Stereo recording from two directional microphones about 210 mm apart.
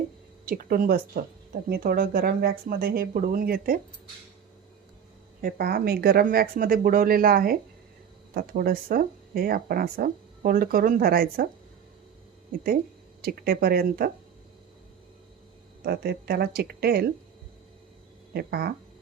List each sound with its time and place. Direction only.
0.4 s speech: 45° right (ahead or behind)
5.4 s speech: 45° right (ahead or behind)
13.2 s speech: 45° right (ahead or behind)
15.8 s speech: 45° right (ahead or behind)
18.3 s speech: 50° right (ahead or behind)